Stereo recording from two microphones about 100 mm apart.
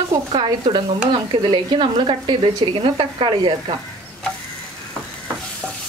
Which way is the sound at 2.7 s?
65° right (ahead or behind).